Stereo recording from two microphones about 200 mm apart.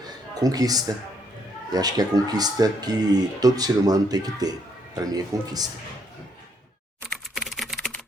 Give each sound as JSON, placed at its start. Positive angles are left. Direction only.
{"t": 0.3, "sound": "a man's voice", "side_deg": -20}
{"t": 7.1, "sound": "typing", "side_deg": 0}